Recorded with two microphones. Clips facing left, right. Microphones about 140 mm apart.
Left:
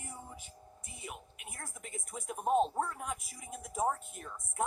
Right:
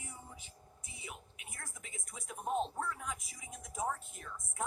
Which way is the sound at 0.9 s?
55° left (ahead or behind).